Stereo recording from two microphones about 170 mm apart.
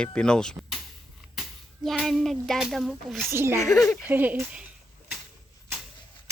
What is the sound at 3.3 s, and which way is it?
Speech, 15° right (ahead or behind).